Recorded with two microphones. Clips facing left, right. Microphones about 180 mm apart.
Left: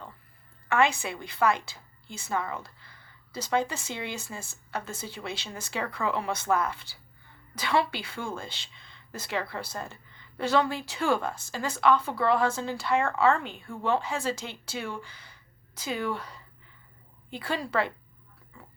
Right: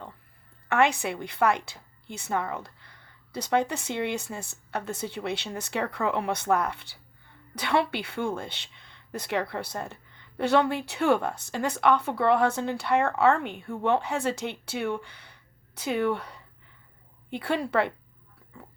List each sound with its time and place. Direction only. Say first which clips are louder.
0.7 s speech: right 2 dB; 65° right (ahead or behind)